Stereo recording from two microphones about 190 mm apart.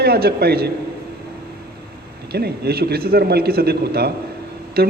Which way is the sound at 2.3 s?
55° right (ahead or behind).